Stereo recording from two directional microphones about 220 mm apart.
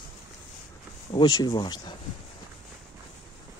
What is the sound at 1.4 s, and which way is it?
Speech, 20° left (ahead or behind).